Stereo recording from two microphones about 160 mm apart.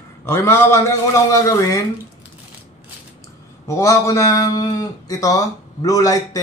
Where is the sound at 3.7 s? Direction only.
20° left (ahead or behind).